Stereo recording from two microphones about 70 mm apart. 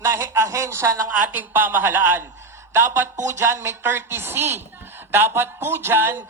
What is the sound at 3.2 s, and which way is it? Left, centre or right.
A woman's voice, right.